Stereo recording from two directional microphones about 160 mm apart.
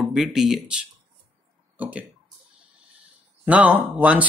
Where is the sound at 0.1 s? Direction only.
5° right (ahead or behind).